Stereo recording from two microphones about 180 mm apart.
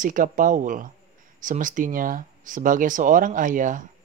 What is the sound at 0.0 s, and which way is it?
Speech, 45° right (ahead or behind).